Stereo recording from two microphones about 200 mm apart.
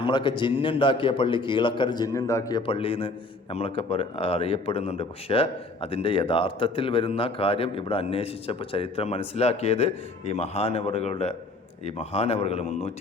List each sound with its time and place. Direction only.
0.0 s a man's voice: 25° left (ahead or behind)